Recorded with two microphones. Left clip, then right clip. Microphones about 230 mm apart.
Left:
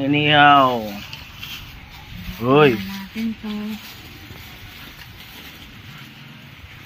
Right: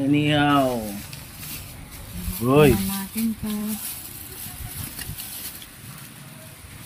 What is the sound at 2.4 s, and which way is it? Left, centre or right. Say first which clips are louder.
Speech: left 3 dB; centre.